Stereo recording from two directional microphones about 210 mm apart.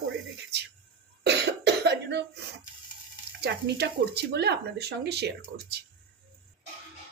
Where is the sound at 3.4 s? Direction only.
50° right (ahead or behind).